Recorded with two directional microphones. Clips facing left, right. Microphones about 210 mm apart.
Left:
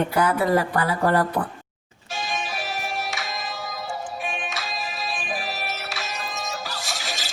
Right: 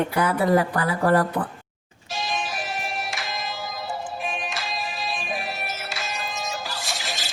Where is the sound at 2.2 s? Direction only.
Centre (ahead or behind).